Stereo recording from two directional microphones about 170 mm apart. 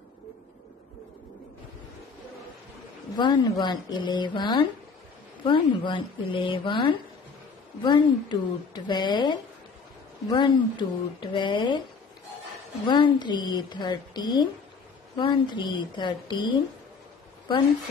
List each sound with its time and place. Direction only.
3.2 s a woman's voice: 25° left (ahead or behind)
12.8 s a woman's voice: 25° left (ahead or behind)